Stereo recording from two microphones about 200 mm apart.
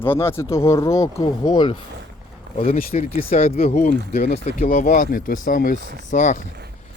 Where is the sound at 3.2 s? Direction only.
30° left (ahead or behind).